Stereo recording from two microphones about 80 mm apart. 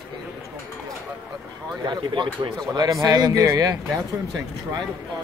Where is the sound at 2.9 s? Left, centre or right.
Right.